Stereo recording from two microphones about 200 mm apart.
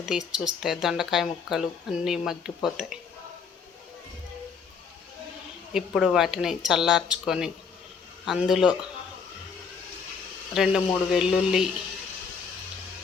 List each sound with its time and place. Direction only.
0.0 s speech: 5° right (ahead or behind)
5.7 s speech: centre (ahead or behind)
10.5 s speech: centre (ahead or behind)